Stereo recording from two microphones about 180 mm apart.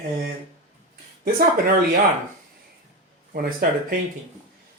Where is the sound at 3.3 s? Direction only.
50° right (ahead or behind).